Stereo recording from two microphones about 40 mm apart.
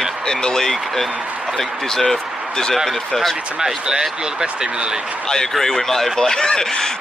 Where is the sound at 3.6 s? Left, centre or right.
Centre.